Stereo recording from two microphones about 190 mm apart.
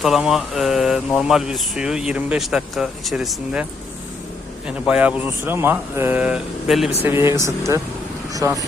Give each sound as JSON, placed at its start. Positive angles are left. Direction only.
{"t": 0.0, "sound": "speech", "side_deg": 0}
{"t": 4.9, "sound": "speech", "side_deg": -5}
{"t": 7.0, "sound": "speech", "side_deg": -15}